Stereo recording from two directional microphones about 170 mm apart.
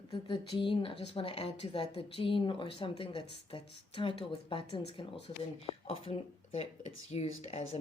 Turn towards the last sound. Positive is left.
turn(degrees=35)  # may be behind; listen again after turning